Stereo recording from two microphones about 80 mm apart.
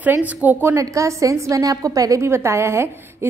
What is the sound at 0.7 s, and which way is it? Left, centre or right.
A woman's voice, right.